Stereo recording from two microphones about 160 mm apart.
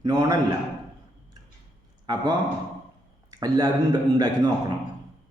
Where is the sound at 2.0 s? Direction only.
25° right (ahead or behind).